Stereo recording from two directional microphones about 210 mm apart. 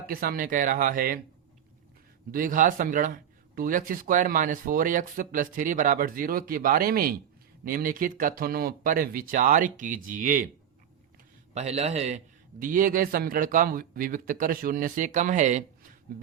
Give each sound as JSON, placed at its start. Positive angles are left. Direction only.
{"t": 0.1, "sound": "speech", "side_deg": -45}
{"t": 2.3, "sound": "a man's voice", "side_deg": -40}
{"t": 11.5, "sound": "a man's voice", "side_deg": -30}